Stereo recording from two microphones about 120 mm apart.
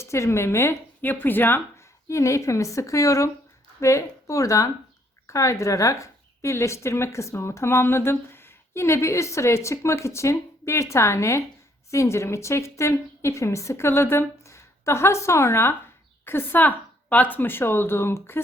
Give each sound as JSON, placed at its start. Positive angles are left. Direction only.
{"t": 0.0, "sound": "a woman's voice", "side_deg": 25}